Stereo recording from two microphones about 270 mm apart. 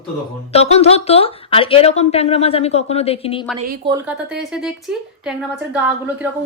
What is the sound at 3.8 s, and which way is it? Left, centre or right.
Speech, centre.